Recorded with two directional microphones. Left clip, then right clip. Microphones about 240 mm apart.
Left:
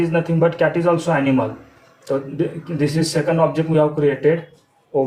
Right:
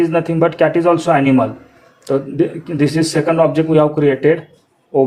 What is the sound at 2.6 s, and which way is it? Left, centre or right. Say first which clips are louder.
A man's voice: right 5 dB; right.